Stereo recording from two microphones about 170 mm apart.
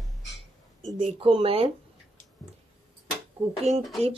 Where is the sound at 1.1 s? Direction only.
35° right (ahead or behind).